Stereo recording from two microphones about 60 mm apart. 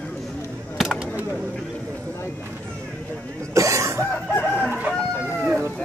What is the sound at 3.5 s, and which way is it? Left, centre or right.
Cough, right.